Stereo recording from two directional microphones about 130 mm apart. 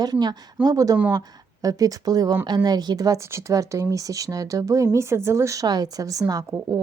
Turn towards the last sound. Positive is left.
turn(degrees=-25)  # may be behind; listen again after turning